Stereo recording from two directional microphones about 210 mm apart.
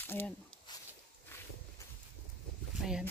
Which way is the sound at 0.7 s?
20° left (ahead or behind).